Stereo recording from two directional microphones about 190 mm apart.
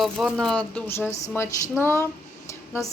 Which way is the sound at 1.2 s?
15° left (ahead or behind).